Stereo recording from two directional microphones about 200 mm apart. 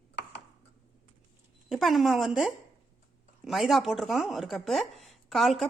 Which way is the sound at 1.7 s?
Centre (ahead or behind).